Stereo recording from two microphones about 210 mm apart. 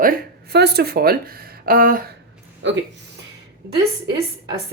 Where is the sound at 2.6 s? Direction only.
60° right (ahead or behind).